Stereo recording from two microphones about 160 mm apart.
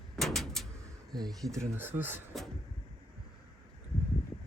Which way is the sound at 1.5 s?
15° right (ahead or behind).